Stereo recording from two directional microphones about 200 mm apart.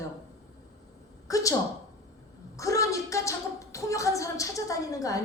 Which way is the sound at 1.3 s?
15° left (ahead or behind).